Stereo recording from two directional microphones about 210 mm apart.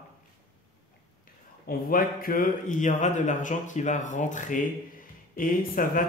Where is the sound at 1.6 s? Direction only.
40° left (ahead or behind).